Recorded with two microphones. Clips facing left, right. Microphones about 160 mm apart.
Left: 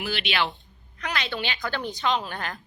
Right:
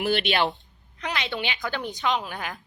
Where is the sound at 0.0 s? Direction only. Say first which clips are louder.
Right 4 dB; 50° right (ahead or behind).